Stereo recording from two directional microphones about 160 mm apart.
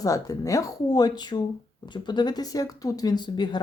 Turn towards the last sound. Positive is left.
turn(degrees=30)  # may be behind; listen again after turning